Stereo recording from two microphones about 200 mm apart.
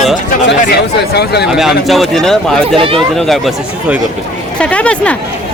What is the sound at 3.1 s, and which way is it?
Speech, centre (ahead or behind).